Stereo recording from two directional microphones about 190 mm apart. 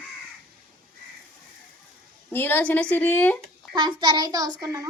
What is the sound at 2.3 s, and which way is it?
A woman's voice, 10° left (ahead or behind).